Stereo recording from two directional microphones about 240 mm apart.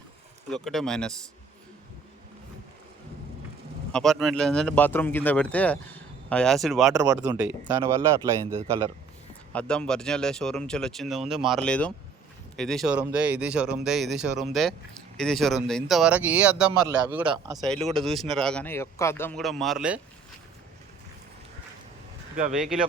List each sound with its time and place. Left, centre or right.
0.5 s speech: centre
3.9 s speech: centre
6.9 s speech: centre
9.5 s speech: centre
17.3 s speech: centre
17.9 s speech: centre
22.5 s speech: centre